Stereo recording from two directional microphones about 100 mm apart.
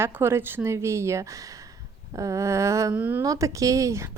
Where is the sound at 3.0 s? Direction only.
20° right (ahead or behind).